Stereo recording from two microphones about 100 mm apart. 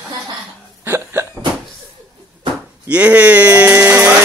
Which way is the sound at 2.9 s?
15° right (ahead or behind).